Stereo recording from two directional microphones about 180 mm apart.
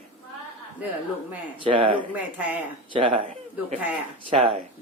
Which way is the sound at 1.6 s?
30° right (ahead or behind).